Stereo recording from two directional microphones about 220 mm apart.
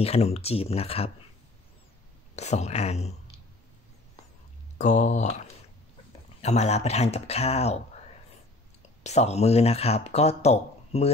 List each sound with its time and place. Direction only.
0.0 s speech: 30° left (ahead or behind)
2.3 s speech: 30° left (ahead or behind)
4.7 s speech: 35° left (ahead or behind)
9.0 s speech: 30° left (ahead or behind)